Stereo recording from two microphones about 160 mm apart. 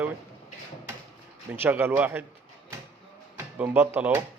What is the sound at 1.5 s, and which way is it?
Speech, 10° right (ahead or behind).